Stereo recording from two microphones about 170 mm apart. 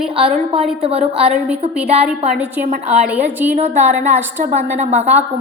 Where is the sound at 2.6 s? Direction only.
50° right (ahead or behind).